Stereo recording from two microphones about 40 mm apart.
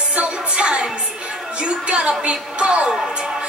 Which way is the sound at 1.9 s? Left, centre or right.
Right.